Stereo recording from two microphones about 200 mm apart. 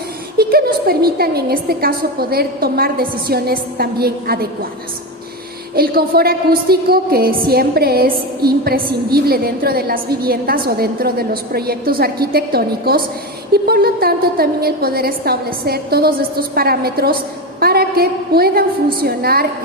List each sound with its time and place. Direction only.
0.3 s a woman's voice: 50° right (ahead or behind)
5.7 s a woman's voice: 50° right (ahead or behind)